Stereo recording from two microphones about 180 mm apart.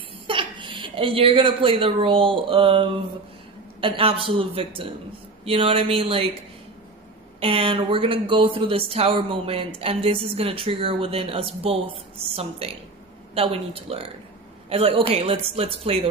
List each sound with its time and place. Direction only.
0.3 s speech: 30° right (ahead or behind)
7.3 s speech: 30° right (ahead or behind)